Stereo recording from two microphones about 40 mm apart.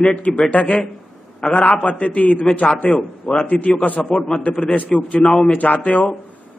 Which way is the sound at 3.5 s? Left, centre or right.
Left.